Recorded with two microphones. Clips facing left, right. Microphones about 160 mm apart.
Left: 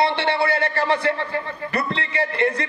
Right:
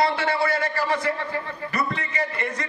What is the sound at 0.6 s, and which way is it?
Speech, 65° left (ahead or behind).